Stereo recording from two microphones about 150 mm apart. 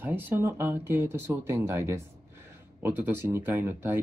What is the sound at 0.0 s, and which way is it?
Speech, 15° right (ahead or behind).